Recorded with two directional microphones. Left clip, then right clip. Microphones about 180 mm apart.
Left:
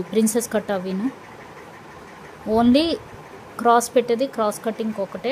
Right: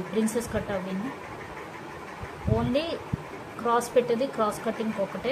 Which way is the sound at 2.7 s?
65° left (ahead or behind).